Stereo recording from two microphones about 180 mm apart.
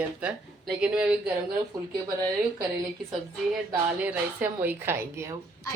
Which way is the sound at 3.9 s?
10° right (ahead or behind).